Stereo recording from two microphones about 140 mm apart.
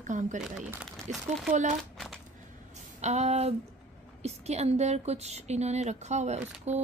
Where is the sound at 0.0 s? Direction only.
60° right (ahead or behind).